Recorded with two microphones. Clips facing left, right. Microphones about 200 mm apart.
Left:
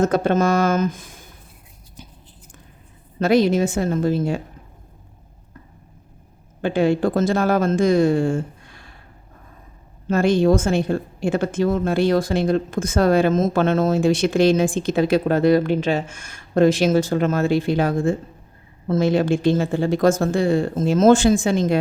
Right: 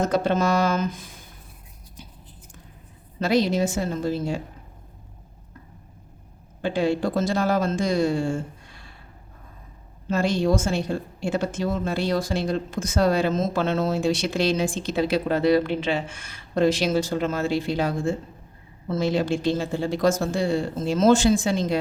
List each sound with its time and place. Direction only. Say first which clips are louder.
0.0 s speech: left 4 dB; 50° left (ahead or behind)
3.2 s speech: left 5 dB; 50° left (ahead or behind)
6.6 s speech: left 4 dB; 55° left (ahead or behind)
10.1 s speech: left 5 dB; 55° left (ahead or behind)